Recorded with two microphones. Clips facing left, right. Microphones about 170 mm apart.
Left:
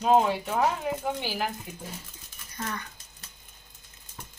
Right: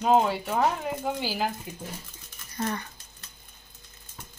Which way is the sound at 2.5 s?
30° right (ahead or behind).